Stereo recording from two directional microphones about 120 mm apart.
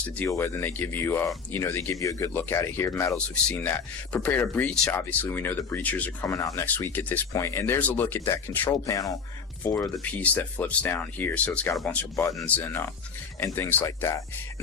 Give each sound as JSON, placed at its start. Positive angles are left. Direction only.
{"t": 0.3, "sound": "speech", "side_deg": 25}
{"t": 3.5, "sound": "speech", "side_deg": 15}